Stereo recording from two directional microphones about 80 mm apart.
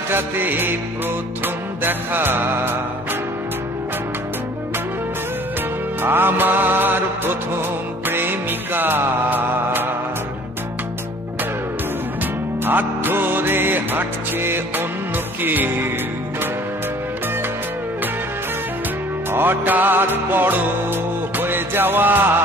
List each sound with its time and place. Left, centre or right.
0.1 s music: right
6.0 s music: right
12.6 s music: right
19.3 s music: right